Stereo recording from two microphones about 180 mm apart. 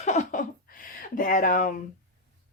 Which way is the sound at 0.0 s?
40° left (ahead or behind).